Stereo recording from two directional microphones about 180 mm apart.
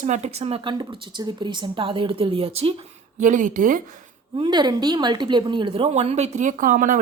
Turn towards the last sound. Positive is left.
turn(degrees=-45)  # may be behind; listen again after turning